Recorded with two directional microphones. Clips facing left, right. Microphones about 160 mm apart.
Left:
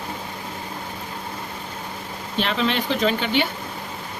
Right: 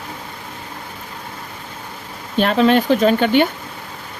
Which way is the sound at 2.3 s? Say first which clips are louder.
Right 9 dB; 45° right (ahead or behind).